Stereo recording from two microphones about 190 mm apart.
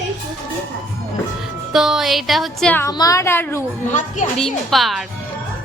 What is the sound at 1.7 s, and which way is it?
A woman's voice, 5° right (ahead or behind).